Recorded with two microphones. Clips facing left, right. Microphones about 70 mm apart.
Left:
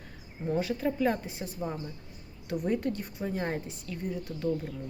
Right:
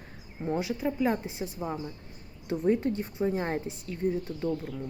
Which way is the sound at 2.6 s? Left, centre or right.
Right.